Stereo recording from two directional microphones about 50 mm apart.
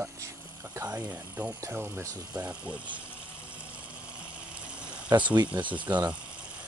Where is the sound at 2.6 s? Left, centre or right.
Right.